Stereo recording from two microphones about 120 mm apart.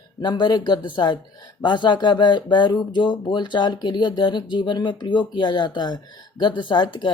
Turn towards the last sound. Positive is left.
turn(degrees=40)  # may be behind; listen again after turning